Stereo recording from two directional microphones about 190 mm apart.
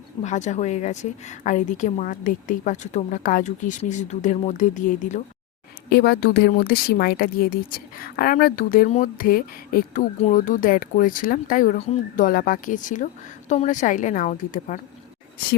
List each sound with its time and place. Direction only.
0.2 s a woman's voice: 40° left (ahead or behind)
5.9 s a woman's voice: 55° left (ahead or behind)